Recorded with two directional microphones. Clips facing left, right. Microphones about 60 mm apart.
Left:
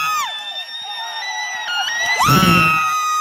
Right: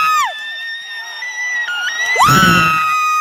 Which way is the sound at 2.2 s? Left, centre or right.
Right.